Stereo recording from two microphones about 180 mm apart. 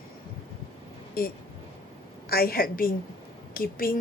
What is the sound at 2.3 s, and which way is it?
A woman's voice, 55° left (ahead or behind).